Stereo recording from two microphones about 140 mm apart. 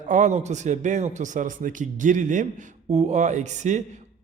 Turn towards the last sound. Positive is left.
turn(degrees=-60)  # may be behind; listen again after turning